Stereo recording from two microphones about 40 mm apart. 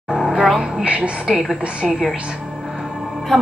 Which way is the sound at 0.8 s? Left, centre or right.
Right.